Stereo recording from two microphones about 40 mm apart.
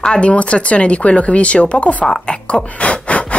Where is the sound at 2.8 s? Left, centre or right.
Left.